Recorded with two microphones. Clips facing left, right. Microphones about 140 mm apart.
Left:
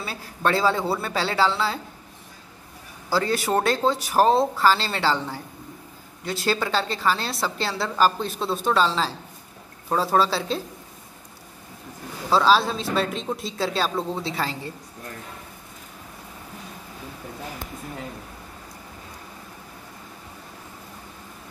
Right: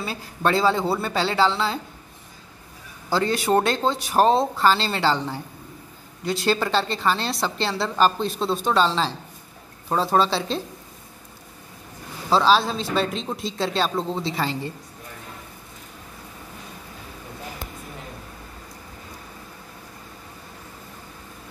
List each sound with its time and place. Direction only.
0.0 s a woman's voice: centre (ahead or behind)
3.1 s a woman's voice: 5° left (ahead or behind)
12.3 s a woman's voice: centre (ahead or behind)